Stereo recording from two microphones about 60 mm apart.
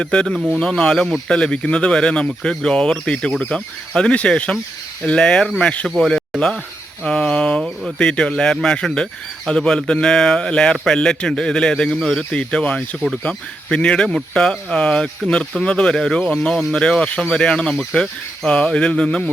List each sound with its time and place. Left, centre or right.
0.0 s a man's voice: centre
7.0 s a man's voice: centre